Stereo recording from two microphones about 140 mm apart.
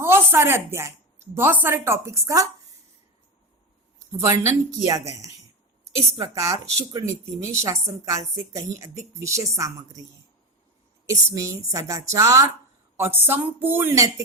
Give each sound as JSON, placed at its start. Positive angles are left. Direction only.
{"t": 0.0, "sound": "speech", "side_deg": -15}
{"t": 4.2, "sound": "speech", "side_deg": -20}
{"t": 11.1, "sound": "speech", "side_deg": -25}